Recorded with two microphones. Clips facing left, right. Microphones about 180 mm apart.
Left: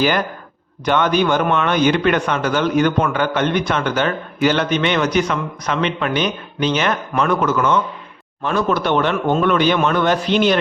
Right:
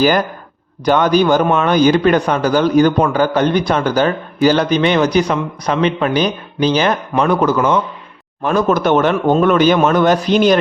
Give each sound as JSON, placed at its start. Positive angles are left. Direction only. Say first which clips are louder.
{"t": 0.0, "sound": "speech", "louder": "right 4 dB", "side_deg": -40}